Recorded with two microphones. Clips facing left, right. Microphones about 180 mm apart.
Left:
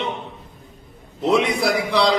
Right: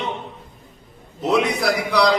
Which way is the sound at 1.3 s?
Centre (ahead or behind).